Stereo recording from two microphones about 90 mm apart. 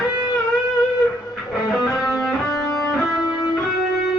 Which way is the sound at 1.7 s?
Centre (ahead or behind).